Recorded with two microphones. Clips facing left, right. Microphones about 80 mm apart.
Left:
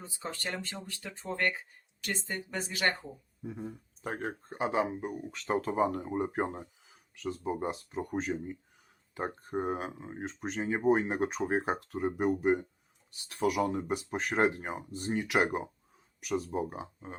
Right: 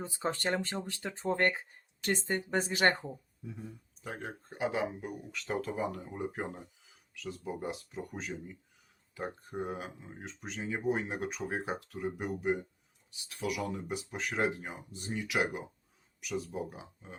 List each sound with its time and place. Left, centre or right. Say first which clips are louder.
0.0 s speech: right 5 dB; right
3.4 s speech: left 6 dB; left